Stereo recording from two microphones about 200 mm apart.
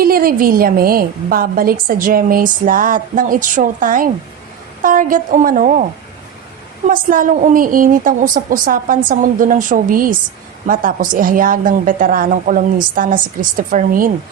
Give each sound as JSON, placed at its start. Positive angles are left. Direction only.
{"t": 0.0, "sound": "a woman's voice", "side_deg": -45}
{"t": 6.8, "sound": "a woman's voice", "side_deg": -40}